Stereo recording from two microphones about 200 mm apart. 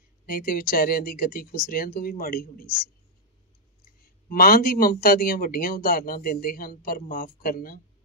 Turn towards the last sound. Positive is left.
turn(degrees=45)  # may be behind; listen again after turning